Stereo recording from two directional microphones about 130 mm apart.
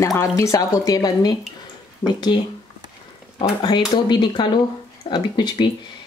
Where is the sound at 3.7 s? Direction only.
30° left (ahead or behind).